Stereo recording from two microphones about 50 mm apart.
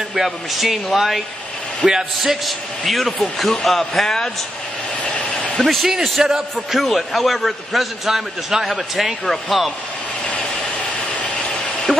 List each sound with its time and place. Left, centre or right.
0.1 s a man's voice: centre
1.9 s a man's voice: centre
2.4 s a man's voice: centre
5.0 s a sound: left
5.7 s a man's voice: centre
11.2 s vehicle: left